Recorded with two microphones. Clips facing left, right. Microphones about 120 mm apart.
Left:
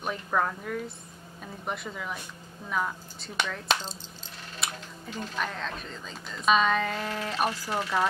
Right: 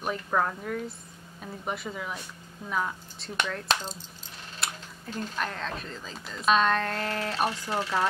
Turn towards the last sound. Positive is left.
turn(degrees=5)  # may be behind; listen again after turning